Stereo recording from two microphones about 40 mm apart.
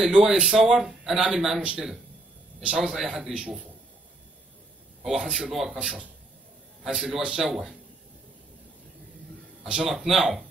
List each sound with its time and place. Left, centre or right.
0.0 s speech: centre
1.6 s speech: right
2.8 s speech: centre
5.0 s speech: centre
5.8 s speech: centre
9.6 s a sound: right
9.8 s speech: centre